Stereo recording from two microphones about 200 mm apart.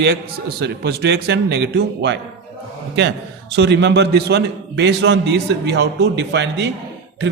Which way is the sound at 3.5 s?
60° right (ahead or behind).